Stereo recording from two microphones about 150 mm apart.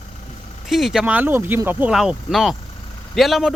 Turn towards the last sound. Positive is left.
turn(degrees=0)  # may be behind; listen again after turning